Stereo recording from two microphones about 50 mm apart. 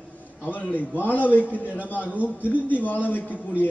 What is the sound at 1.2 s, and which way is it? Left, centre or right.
A man's voice, left.